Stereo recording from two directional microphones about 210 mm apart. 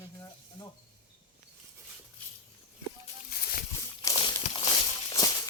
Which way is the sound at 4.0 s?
20° left (ahead or behind).